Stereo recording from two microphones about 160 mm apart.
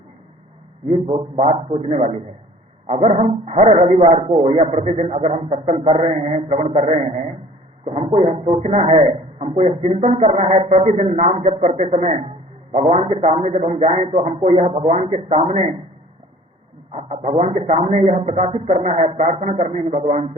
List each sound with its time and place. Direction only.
0.9 s speech: 35° right (ahead or behind)
16.9 s speech: 40° right (ahead or behind)